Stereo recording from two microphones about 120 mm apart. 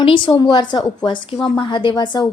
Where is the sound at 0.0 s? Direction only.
45° left (ahead or behind).